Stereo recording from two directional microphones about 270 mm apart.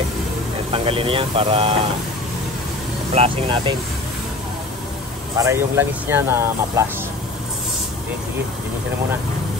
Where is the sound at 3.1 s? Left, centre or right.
Right.